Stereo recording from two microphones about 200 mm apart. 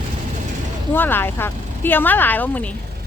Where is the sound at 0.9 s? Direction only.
10° left (ahead or behind).